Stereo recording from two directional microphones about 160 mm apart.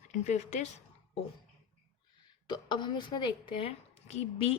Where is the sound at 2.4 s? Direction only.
30° left (ahead or behind).